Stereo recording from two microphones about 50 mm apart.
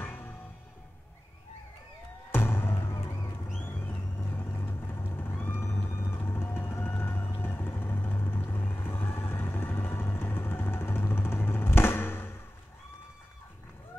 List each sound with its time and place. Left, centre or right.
0.0 s music: left
2.3 s music: left
3.6 s vehicle: left